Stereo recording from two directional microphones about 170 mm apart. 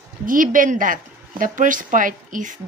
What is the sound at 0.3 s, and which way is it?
A woman's voice, 50° right (ahead or behind).